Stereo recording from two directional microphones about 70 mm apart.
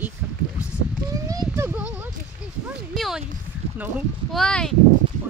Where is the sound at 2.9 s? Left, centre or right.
Centre.